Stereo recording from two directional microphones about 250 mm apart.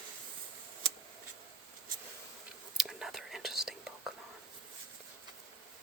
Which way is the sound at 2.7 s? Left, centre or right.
Centre.